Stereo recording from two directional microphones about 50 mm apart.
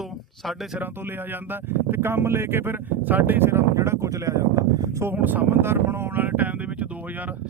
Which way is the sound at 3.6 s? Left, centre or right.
Right.